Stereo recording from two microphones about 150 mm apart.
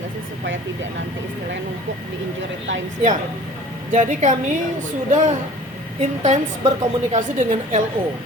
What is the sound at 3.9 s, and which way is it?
A woman's voice, 60° right (ahead or behind).